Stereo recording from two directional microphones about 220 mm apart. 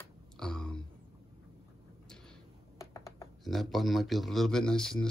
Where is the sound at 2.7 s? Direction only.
15° left (ahead or behind).